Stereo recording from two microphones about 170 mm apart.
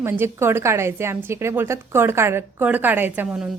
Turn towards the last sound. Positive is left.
turn(degrees=-10)  # may be behind; listen again after turning